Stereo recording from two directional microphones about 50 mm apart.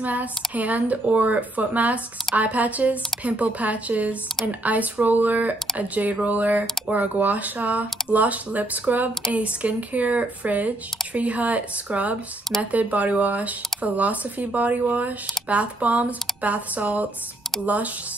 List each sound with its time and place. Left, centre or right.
0.0 s speech: right